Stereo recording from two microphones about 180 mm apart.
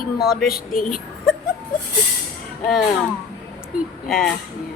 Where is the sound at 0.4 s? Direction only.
55° left (ahead or behind).